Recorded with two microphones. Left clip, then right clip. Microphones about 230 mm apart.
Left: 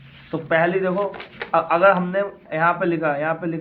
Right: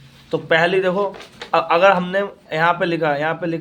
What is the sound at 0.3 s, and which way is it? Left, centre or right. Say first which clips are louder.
A man's voice: right 3 dB; right.